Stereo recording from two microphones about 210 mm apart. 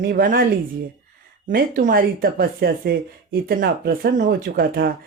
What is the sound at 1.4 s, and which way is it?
Speech, 40° right (ahead or behind).